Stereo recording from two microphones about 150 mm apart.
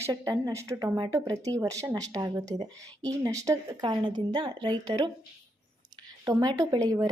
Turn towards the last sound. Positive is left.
turn(degrees=-25)  # may be behind; listen again after turning